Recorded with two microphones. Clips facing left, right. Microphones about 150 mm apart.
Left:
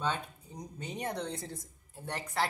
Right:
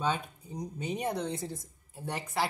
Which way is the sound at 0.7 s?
10° right (ahead or behind).